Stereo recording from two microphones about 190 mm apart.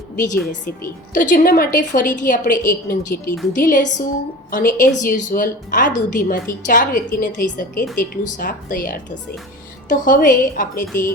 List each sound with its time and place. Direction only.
0.6 s a woman's voice: 45° left (ahead or behind)